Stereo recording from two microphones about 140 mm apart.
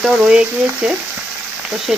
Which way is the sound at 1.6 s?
5° right (ahead or behind).